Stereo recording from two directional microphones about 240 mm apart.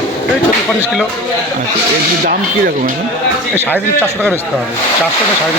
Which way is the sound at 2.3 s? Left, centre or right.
Right.